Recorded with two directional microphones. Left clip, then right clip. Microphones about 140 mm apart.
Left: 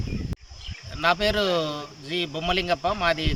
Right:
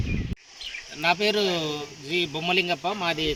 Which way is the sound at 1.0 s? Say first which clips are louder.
Left 1 dB; 15° left (ahead or behind).